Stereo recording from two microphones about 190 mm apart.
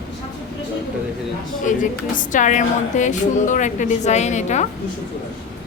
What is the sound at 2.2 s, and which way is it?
A woman's voice, 40° left (ahead or behind).